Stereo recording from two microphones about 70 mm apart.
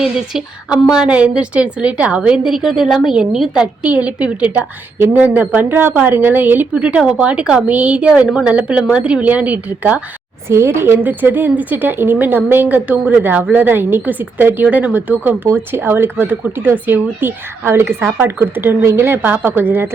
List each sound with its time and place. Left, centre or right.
0.0 s a woman's voice: centre
4.9 s speech: right
6.7 s a woman's voice: centre
10.5 s speech: right